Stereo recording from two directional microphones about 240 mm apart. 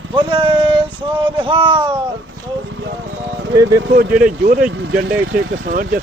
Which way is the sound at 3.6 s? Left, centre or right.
Right.